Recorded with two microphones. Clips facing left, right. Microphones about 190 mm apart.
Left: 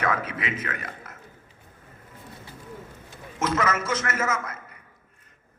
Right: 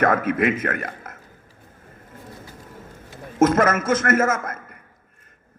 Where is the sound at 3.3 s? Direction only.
50° right (ahead or behind).